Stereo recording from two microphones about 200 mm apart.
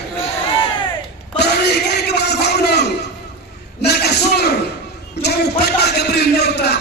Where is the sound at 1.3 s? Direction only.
55° left (ahead or behind).